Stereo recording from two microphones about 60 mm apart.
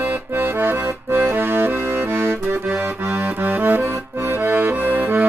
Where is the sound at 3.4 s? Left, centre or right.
Right.